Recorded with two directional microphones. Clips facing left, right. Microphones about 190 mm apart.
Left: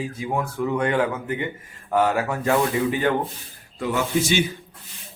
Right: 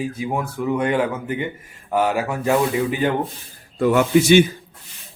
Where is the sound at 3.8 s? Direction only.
55° right (ahead or behind).